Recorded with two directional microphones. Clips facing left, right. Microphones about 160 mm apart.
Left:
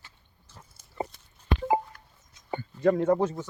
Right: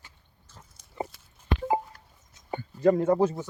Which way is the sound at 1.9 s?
40° right (ahead or behind).